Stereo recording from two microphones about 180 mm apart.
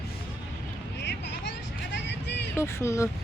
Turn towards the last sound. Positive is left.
turn(degrees=15)  # may be behind; listen again after turning